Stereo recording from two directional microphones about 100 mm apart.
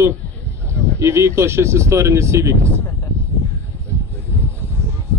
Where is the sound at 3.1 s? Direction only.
25° right (ahead or behind).